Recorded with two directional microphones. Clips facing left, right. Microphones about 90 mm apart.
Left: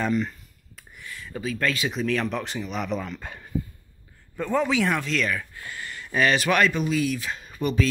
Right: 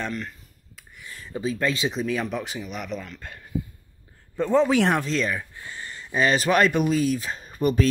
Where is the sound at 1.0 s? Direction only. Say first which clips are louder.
Left 2 dB; 30° right (ahead or behind).